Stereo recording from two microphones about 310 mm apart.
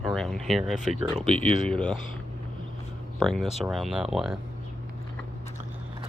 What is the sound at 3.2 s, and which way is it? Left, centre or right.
Speech, centre.